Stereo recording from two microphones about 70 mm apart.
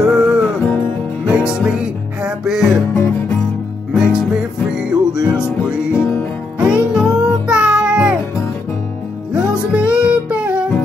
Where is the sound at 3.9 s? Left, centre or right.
Centre.